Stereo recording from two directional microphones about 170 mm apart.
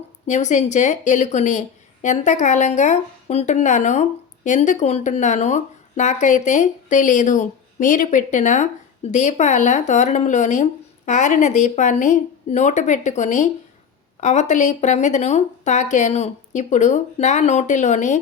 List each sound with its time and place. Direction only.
0.3 s a woman's voice: 45° left (ahead or behind)